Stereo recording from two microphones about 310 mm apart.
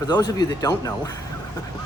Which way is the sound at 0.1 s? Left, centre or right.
Centre.